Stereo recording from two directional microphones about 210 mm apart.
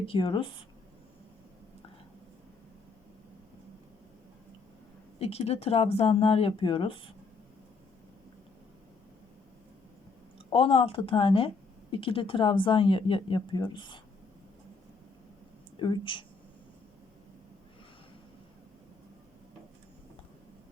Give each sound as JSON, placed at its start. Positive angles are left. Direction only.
{"t": 0.0, "sound": "speech", "side_deg": 25}
{"t": 5.2, "sound": "speech", "side_deg": 30}
{"t": 10.3, "sound": "speech", "side_deg": 25}
{"t": 15.8, "sound": "speech", "side_deg": 25}